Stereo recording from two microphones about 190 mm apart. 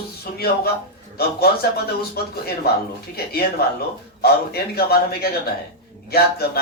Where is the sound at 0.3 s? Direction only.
55° left (ahead or behind).